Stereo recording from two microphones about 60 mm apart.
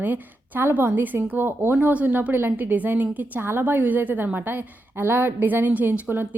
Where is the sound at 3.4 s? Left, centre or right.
Right.